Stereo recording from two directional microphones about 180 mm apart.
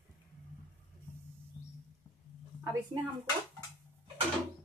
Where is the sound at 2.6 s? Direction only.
20° right (ahead or behind).